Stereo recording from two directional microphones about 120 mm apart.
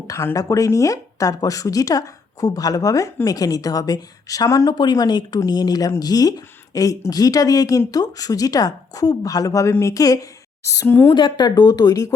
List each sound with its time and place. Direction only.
0.1 s a woman's voice: 25° left (ahead or behind)
11.1 s a woman's voice: 40° left (ahead or behind)